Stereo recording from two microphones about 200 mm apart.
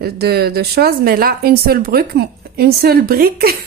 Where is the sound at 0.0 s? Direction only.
50° right (ahead or behind).